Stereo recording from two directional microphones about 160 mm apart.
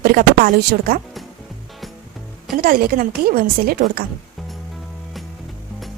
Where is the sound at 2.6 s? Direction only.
65° right (ahead or behind).